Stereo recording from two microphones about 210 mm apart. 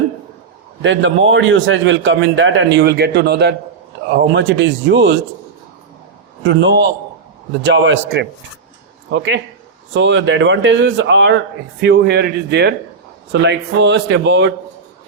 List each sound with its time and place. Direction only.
0.8 s a man's voice: 60° right (ahead or behind)
6.4 s a man's voice: 60° right (ahead or behind)